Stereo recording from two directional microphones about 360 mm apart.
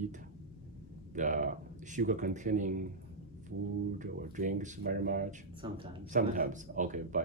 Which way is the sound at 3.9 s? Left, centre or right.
Right.